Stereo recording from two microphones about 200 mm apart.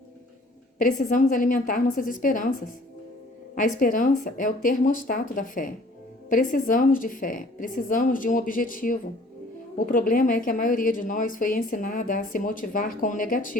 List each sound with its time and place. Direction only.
0.8 s a woman's voice: 40° left (ahead or behind)